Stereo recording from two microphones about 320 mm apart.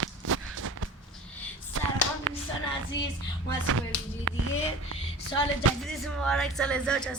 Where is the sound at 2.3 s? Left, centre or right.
Right.